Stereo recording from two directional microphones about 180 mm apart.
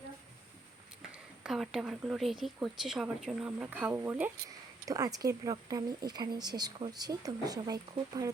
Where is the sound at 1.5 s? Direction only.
Centre (ahead or behind).